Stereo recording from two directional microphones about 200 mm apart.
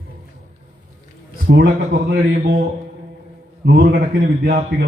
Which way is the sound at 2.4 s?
50° right (ahead or behind).